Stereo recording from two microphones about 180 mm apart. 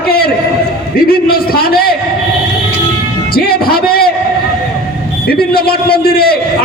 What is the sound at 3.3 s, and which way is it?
Speech, 55° left (ahead or behind).